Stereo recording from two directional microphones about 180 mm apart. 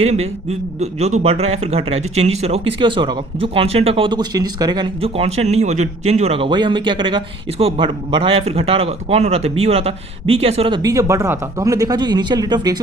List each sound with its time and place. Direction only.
0.0 s speech: 35° right (ahead or behind)
10.8 s speech: 20° right (ahead or behind)